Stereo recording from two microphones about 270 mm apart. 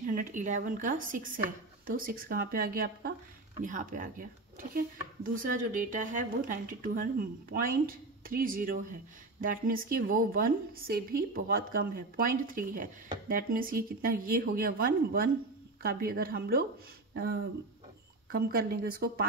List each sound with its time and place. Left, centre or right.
0.0 s speech: right